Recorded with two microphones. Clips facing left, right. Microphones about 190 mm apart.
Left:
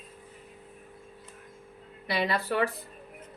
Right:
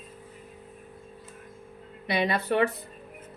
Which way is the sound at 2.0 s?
20° right (ahead or behind).